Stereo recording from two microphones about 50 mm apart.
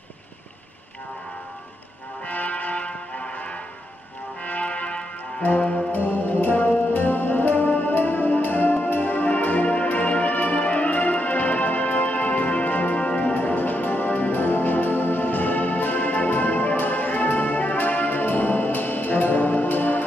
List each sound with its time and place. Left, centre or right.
2.2 s music: left
4.5 s music: left
5.9 s music: left